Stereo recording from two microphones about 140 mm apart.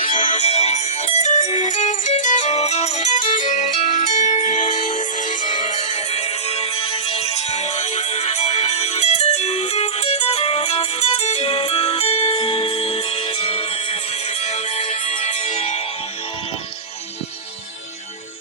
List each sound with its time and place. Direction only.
0.1 s music: 35° left (ahead or behind)
0.4 s music: 50° left (ahead or behind)